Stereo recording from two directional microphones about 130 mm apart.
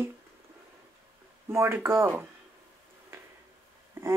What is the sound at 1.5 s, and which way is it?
Speech, 20° right (ahead or behind).